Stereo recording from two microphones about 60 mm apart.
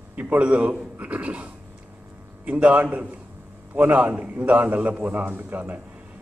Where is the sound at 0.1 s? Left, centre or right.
Right.